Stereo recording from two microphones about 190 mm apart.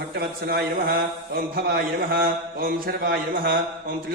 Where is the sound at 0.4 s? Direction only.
55° right (ahead or behind).